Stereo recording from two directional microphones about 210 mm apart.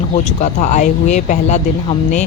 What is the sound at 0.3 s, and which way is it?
Speech, 35° left (ahead or behind).